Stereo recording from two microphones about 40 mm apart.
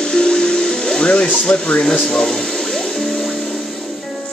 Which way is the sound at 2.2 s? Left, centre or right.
Centre.